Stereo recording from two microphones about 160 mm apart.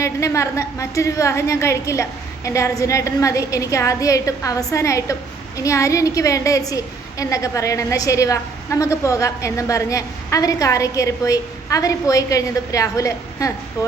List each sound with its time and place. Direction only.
0.0 s a woman's voice: 20° left (ahead or behind)